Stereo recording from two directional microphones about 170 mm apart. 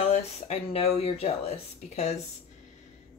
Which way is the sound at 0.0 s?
40° left (ahead or behind).